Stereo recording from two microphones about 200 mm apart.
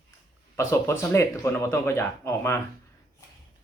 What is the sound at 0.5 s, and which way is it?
A man's voice, 15° left (ahead or behind).